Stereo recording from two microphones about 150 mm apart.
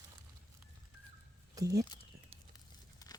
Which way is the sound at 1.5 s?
25° right (ahead or behind).